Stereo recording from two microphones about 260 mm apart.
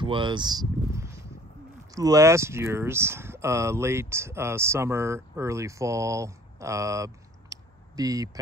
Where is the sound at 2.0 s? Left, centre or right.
Centre.